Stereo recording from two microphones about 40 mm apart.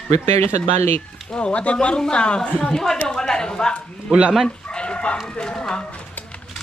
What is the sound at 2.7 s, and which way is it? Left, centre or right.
Speech, centre.